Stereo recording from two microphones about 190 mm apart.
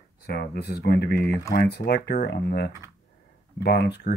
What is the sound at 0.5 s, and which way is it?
Speech, 60° left (ahead or behind).